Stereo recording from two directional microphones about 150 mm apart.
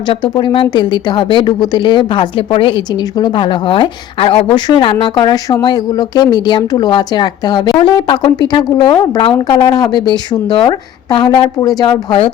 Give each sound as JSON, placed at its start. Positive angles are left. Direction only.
{"t": 0.1, "sound": "speech", "side_deg": 35}